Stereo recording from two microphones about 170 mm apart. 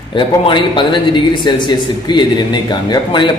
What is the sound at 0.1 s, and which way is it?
Speech, 30° left (ahead or behind).